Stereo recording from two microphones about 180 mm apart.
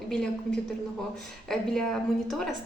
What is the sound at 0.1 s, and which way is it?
A woman's voice, 5° left (ahead or behind).